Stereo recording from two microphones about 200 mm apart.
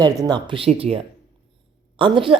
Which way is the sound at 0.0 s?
20° right (ahead or behind).